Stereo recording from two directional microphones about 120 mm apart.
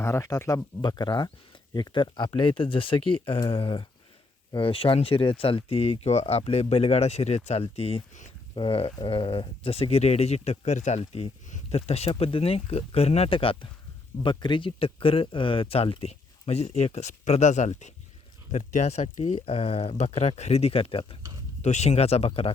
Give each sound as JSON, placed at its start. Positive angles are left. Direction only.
{"t": 0.0, "sound": "speech", "side_deg": 25}
{"t": 21.6, "sound": "speech", "side_deg": 70}